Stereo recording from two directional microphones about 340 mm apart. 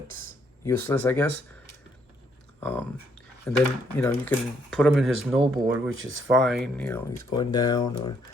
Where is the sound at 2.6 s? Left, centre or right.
Centre.